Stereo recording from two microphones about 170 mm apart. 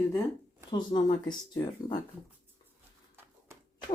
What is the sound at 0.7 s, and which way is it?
Speech, 25° left (ahead or behind).